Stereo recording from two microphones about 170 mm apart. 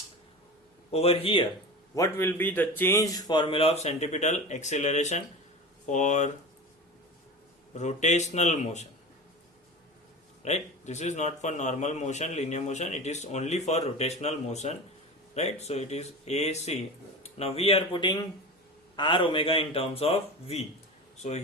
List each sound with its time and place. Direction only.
0.9 s a man's voice: 35° left (ahead or behind)
2.0 s a man's voice: 15° left (ahead or behind); by 6.3 s 45° left (ahead or behind)
7.7 s a man's voice: 45° left (ahead or behind)
10.4 s a man's voice: 40° left (ahead or behind)